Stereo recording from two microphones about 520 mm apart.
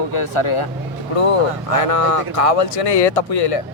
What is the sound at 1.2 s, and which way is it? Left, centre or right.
A man's voice, left.